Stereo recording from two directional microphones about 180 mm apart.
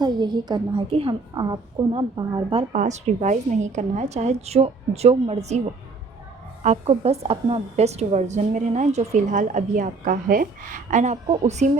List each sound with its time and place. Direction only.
0.0 s a woman's voice: 25° right (ahead or behind)
2.7 s a woman's voice: 40° right (ahead or behind)
6.6 s a woman's voice: 35° right (ahead or behind)